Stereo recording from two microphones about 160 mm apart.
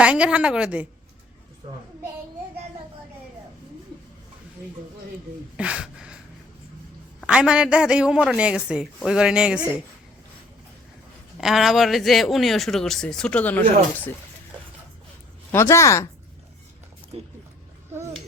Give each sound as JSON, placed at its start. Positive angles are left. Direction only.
{"t": 0.0, "sound": "a woman's voice", "side_deg": -5}
{"t": 5.5, "sound": "a woman's voice", "side_deg": -5}
{"t": 7.2, "sound": "speech", "side_deg": -5}
{"t": 11.3, "sound": "speech", "side_deg": 0}
{"t": 15.5, "sound": "speech", "side_deg": 15}
{"t": 17.1, "sound": "speech", "side_deg": -35}